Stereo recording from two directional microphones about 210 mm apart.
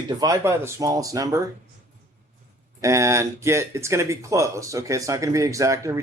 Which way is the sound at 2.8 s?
15° right (ahead or behind).